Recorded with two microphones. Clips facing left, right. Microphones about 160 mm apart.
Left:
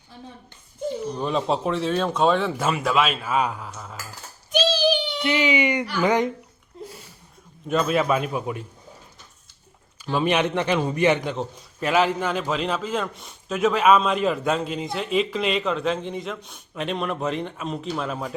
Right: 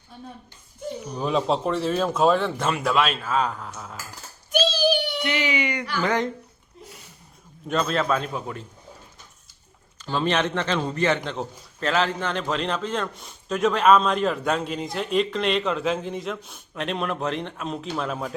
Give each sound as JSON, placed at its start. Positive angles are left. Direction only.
{"t": 1.1, "sound": "a man's voice", "side_deg": 0}
{"t": 4.5, "sound": "child singing", "side_deg": -60}
{"t": 5.2, "sound": "speech", "side_deg": 20}
{"t": 7.7, "sound": "speech", "side_deg": 10}
{"t": 10.0, "sound": "a man's voice", "side_deg": 10}